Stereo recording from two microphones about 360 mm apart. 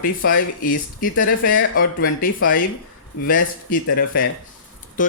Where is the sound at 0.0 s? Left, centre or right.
Left.